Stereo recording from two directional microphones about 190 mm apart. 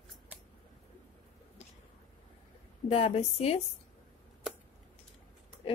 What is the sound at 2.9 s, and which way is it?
Speech, 30° left (ahead or behind).